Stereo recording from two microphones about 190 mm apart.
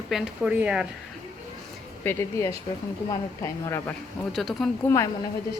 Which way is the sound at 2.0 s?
10° left (ahead or behind).